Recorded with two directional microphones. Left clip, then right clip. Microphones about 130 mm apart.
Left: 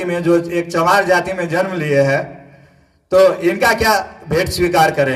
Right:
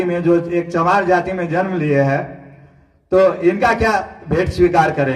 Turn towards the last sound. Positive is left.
turn(degrees=30)  # may be behind; listen again after turning